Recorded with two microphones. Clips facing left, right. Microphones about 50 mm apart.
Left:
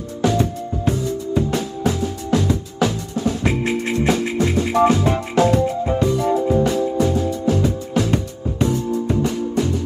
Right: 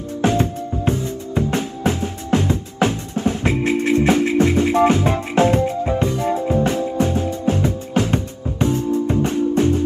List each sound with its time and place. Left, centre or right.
0.2 s music: right